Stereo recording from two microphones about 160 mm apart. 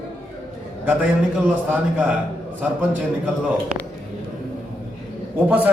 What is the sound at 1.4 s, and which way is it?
Speech, 10° right (ahead or behind).